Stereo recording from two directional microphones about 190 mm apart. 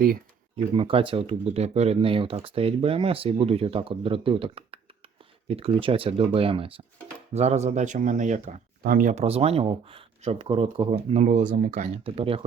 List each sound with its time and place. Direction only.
0.5 s speech: 30° right (ahead or behind)